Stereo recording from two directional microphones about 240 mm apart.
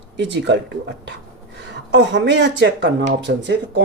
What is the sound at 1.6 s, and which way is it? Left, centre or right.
Speech, right.